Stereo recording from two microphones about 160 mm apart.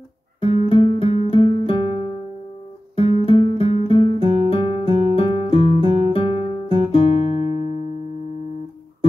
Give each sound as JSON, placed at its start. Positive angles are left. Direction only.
{"t": 0.7, "sound": "music", "side_deg": 35}
{"t": 3.3, "sound": "music", "side_deg": 35}